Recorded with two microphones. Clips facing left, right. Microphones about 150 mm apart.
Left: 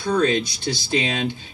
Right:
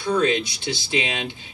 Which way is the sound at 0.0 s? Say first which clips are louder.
Left 1 dB; 40° left (ahead or behind).